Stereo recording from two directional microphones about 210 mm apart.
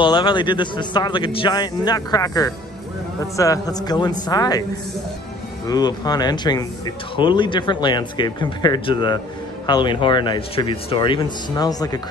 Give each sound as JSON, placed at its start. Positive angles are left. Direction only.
{"t": 0.0, "sound": "a man's voice", "side_deg": 20}
{"t": 5.7, "sound": "a man's voice", "side_deg": 20}